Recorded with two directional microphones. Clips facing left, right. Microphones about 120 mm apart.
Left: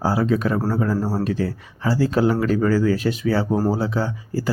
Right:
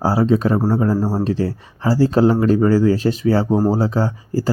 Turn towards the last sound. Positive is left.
turn(degrees=-35)  # may be behind; listen again after turning